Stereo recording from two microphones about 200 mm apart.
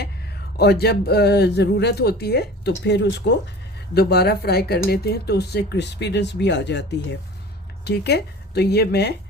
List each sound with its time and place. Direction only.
0.5 s speech: 55° left (ahead or behind)
7.9 s speech: 55° left (ahead or behind)